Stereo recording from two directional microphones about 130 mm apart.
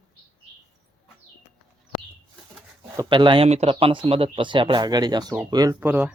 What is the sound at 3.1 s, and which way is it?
Speech, 40° right (ahead or behind).